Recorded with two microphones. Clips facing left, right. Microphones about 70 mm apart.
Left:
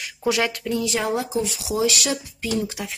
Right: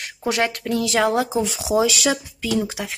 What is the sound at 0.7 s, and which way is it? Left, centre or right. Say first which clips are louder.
Speech: right 6 dB; right.